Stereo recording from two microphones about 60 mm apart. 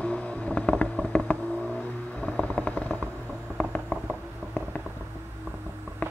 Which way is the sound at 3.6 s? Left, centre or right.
Centre.